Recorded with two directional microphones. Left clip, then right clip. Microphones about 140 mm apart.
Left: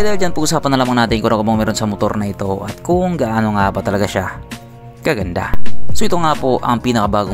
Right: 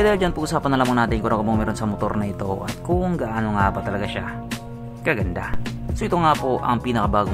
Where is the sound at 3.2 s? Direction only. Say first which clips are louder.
Left 6 dB; 45° left (ahead or behind).